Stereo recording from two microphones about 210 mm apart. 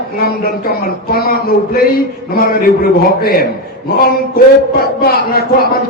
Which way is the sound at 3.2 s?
45° left (ahead or behind).